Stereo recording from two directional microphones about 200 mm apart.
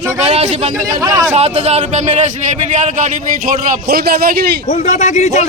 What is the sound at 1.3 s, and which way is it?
A man's voice, 35° right (ahead or behind).